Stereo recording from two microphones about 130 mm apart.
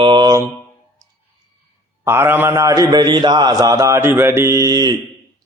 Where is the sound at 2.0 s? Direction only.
15° right (ahead or behind).